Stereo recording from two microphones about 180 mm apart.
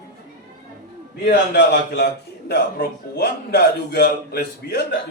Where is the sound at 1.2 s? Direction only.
65° left (ahead or behind).